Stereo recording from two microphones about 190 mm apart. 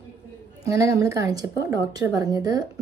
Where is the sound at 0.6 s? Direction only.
15° right (ahead or behind).